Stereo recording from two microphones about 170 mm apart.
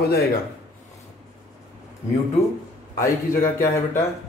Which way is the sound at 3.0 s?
15° left (ahead or behind).